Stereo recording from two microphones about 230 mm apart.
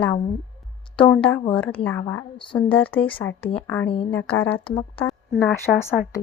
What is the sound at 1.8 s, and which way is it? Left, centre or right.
Speech, centre.